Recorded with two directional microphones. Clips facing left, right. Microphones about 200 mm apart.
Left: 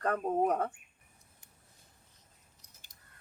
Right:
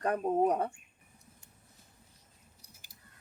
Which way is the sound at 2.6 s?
10° right (ahead or behind).